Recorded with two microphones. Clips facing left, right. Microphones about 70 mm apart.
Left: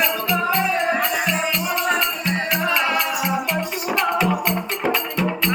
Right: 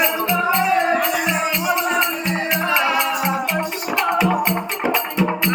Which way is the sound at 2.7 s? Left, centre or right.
Centre.